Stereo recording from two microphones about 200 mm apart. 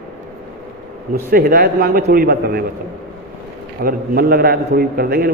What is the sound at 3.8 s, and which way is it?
A man's voice, 50° right (ahead or behind).